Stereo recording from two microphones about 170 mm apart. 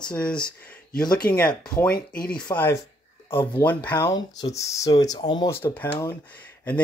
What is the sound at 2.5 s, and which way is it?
Speech, 10° left (ahead or behind).